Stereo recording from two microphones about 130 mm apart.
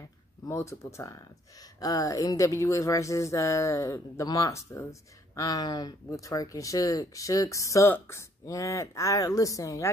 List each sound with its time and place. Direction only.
0.5 s speech: 20° left (ahead or behind)